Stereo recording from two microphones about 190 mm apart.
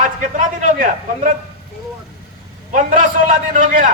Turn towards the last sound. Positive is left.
turn(degrees=-45)  # may be behind; listen again after turning